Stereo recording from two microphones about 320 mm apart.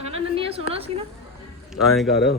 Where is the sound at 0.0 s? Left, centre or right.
Centre.